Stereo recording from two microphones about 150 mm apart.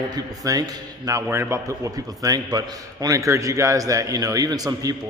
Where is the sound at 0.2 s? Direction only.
25° right (ahead or behind).